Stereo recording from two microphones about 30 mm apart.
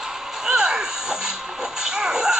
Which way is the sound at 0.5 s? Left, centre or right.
Right.